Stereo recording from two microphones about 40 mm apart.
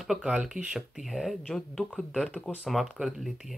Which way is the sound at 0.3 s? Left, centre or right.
Centre.